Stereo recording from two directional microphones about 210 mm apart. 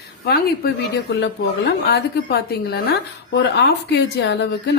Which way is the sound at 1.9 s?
45° left (ahead or behind).